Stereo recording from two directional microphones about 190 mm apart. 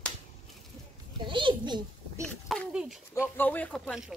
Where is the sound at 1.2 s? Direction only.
25° right (ahead or behind).